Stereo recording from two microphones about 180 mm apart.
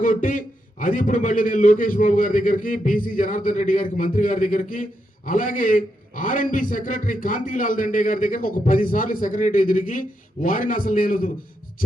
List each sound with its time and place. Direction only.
0.0 s a man's voice: 50° left (ahead or behind)